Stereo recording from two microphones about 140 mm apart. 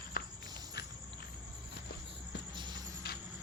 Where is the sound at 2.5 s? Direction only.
30° right (ahead or behind).